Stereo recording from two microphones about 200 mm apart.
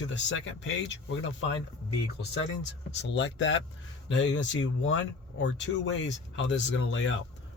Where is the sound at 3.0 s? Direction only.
60° left (ahead or behind).